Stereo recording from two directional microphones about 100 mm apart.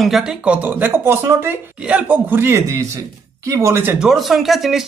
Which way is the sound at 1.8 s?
10° right (ahead or behind).